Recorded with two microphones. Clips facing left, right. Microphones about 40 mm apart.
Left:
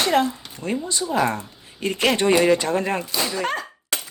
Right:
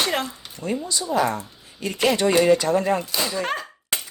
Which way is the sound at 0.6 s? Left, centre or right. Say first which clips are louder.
Left 1 dB; left.